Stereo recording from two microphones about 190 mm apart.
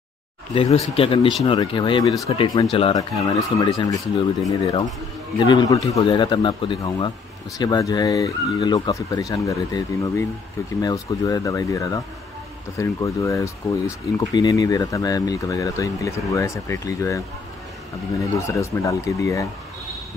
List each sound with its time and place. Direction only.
0.6 s speech: 30° left (ahead or behind); by 17.2 s 15° left (ahead or behind)
18.2 s speech: 15° left (ahead or behind)